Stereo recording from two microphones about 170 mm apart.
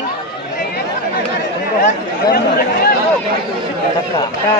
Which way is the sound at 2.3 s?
65° left (ahead or behind).